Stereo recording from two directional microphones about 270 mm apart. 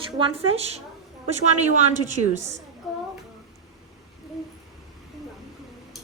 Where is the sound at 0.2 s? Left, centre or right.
Right.